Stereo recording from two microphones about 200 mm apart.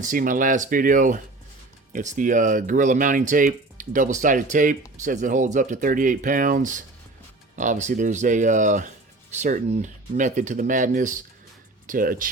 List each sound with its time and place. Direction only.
0.0 s speech: 40° right (ahead or behind)